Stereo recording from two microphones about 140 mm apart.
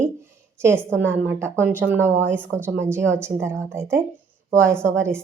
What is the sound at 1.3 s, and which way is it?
A woman's voice, 15° right (ahead or behind).